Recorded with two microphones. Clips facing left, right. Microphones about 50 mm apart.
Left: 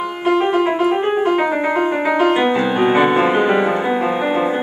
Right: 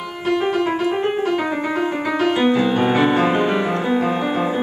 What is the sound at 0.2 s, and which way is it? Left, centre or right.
Piano, centre.